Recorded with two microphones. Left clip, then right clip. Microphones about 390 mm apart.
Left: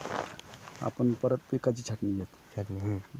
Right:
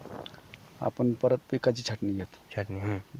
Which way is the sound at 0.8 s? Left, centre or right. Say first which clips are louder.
Right 3 dB; right.